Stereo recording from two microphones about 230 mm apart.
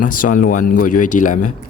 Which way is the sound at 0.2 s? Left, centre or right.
Left.